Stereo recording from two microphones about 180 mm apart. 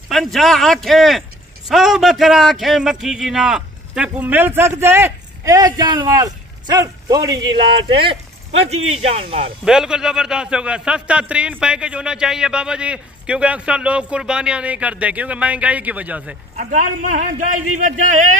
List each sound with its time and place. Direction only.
0.1 s a man's voice: centre (ahead or behind); by 9.5 s 35° right (ahead or behind)
9.7 s a man's voice: 5° right (ahead or behind)
16.5 s a man's voice: 45° right (ahead or behind)